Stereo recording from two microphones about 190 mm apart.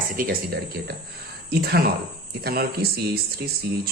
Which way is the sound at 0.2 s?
50° right (ahead or behind).